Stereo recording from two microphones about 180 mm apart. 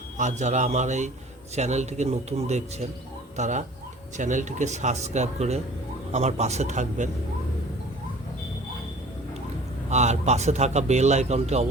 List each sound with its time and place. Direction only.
0.2 s a man's voice: 40° right (ahead or behind)
9.9 s a man's voice: 40° right (ahead or behind)